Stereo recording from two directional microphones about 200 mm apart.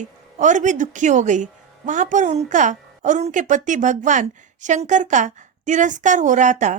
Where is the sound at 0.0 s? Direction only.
35° right (ahead or behind).